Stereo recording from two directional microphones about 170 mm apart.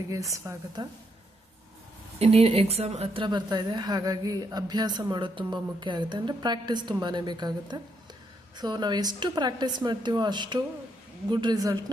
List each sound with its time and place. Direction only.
0.3 s a woman's voice: 20° right (ahead or behind)
2.1 s a woman's voice: 35° right (ahead or behind)